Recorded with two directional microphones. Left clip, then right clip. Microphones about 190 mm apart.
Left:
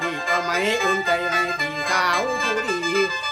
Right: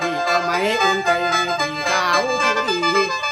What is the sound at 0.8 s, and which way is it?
Music, 30° right (ahead or behind).